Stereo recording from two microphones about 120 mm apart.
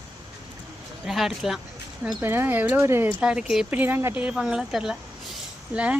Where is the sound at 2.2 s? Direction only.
20° right (ahead or behind).